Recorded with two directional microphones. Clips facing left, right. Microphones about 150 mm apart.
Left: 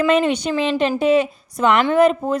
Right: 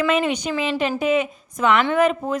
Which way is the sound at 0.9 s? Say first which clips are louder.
Left 4 dB; 35° left (ahead or behind).